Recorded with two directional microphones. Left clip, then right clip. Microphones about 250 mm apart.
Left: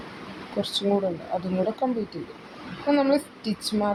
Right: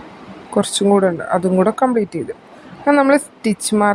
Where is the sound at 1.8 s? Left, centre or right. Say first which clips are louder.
Right 11 dB; right.